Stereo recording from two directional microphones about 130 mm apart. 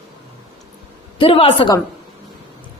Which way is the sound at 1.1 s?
45° left (ahead or behind).